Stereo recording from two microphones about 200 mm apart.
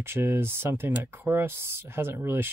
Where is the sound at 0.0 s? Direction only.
10° right (ahead or behind).